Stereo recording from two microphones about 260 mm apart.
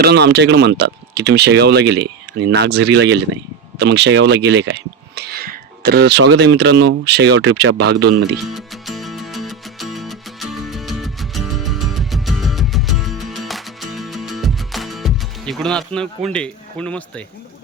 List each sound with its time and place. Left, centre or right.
0.0 s speech: right
8.4 s music: centre